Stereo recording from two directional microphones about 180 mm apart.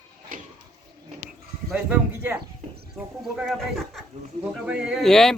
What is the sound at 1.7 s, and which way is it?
Speech, 5° right (ahead or behind).